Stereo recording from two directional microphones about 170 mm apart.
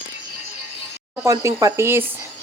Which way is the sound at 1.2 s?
20° right (ahead or behind).